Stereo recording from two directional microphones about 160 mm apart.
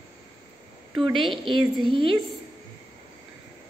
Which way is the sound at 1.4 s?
30° right (ahead or behind).